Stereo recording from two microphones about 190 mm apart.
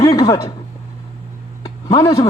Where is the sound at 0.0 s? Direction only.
20° left (ahead or behind).